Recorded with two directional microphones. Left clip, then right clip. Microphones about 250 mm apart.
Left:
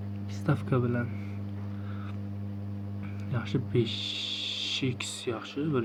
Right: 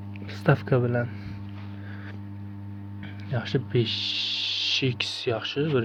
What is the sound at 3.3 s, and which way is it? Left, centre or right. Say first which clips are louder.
Speech: right 4 dB; right.